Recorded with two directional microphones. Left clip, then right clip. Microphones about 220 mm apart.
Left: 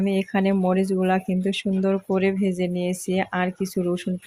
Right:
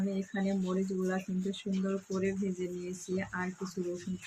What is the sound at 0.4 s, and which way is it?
Speech, 40° left (ahead or behind).